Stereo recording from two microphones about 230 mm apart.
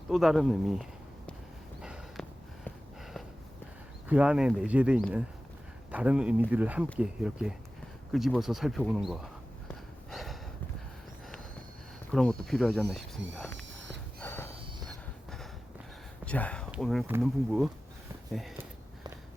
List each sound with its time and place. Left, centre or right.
0.1 s speech: centre
1.8 s a sound: centre
4.1 s speech: centre
10.1 s snort: centre
12.1 s speech: centre
13.6 s a sound: right
14.2 s snort: centre
16.2 s speech: centre